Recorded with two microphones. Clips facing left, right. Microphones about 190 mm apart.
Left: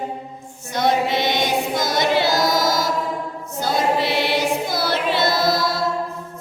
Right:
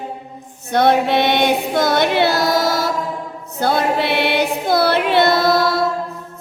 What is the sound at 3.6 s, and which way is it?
Music, 60° right (ahead or behind).